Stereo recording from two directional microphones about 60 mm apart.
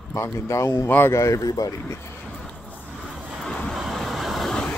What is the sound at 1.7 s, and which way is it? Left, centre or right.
Speech, left.